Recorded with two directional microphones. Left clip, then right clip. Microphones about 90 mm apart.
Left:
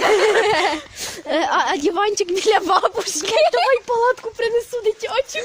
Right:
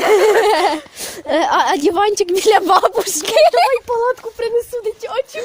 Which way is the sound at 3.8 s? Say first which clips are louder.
Right 1 dB; 50° right (ahead or behind).